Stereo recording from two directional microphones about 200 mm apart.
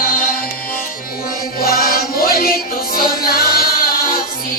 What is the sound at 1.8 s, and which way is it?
Music, 50° left (ahead or behind).